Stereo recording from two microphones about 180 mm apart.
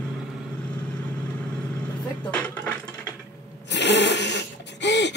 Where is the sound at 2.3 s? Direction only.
5° left (ahead or behind).